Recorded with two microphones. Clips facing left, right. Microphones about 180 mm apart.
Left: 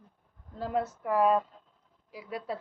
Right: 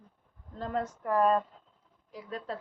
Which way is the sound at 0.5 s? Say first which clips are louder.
Left 2 dB; 10° left (ahead or behind).